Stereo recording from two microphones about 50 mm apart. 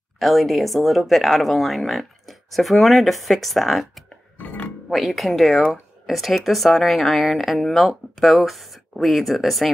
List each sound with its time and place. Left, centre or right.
0.2 s speech: centre
4.4 s music: left
4.8 s speech: centre